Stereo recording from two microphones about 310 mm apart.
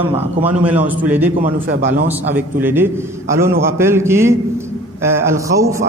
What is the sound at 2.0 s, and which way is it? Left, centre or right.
A man's voice, centre.